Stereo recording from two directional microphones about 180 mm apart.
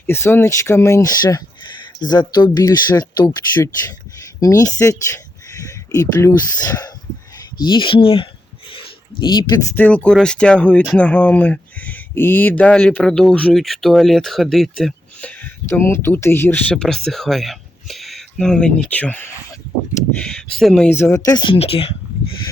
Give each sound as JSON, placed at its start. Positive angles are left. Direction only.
{"t": 0.1, "sound": "speech", "side_deg": 15}
{"t": 8.7, "sound": "a sound", "side_deg": 25}
{"t": 9.7, "sound": "speech", "side_deg": 5}